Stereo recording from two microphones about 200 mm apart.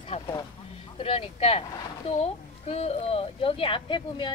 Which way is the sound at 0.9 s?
25° left (ahead or behind).